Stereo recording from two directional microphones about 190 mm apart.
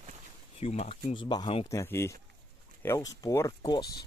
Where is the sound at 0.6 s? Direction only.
35° left (ahead or behind).